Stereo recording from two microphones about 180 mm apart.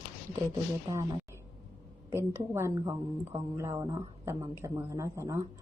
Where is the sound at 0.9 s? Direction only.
20° right (ahead or behind).